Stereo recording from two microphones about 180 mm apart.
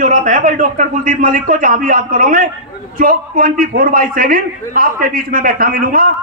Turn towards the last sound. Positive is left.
turn(degrees=-55)  # may be behind; listen again after turning